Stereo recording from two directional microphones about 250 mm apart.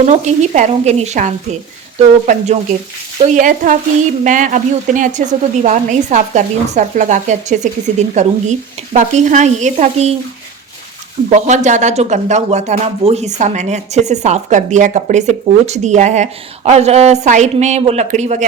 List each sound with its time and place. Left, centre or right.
0.0 s speech: right
3.2 s frying: right
4.2 s speech: right
11.3 s speech: right